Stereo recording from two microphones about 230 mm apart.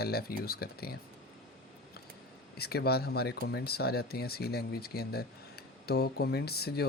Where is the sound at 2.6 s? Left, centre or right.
Left.